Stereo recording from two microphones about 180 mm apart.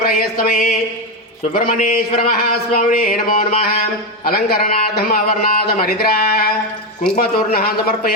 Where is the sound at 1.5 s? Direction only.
50° left (ahead or behind).